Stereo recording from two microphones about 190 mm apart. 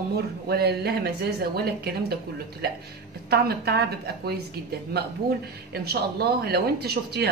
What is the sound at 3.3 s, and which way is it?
A woman's voice, 60° right (ahead or behind).